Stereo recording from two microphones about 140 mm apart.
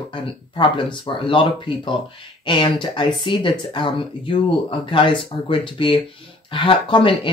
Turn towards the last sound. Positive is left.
turn(degrees=35)  # may be behind; listen again after turning